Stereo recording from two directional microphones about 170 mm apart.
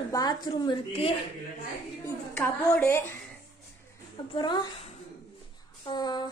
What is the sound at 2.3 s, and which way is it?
Speech, 10° left (ahead or behind).